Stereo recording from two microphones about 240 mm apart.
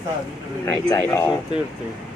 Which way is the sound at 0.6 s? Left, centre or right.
Centre.